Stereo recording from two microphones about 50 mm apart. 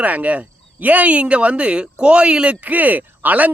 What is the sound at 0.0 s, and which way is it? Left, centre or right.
Speech, right.